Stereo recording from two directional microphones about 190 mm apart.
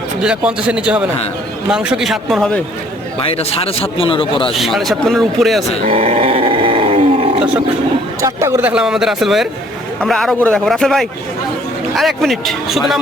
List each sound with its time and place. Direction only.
0.2 s speech: 5° right (ahead or behind)
3.2 s a man's voice: 30° left (ahead or behind)
4.5 s speech: centre (ahead or behind)
5.9 s roar: 30° right (ahead or behind)
8.2 s speech: 15° right (ahead or behind)